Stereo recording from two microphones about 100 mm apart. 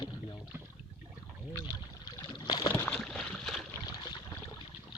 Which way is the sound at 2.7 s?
20° left (ahead or behind).